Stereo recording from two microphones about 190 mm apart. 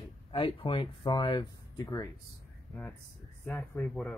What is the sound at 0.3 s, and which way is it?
Speech, 25° left (ahead or behind).